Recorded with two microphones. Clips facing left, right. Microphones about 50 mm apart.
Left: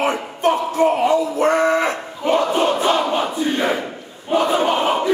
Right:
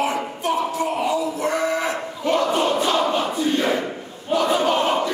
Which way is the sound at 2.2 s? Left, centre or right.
Centre.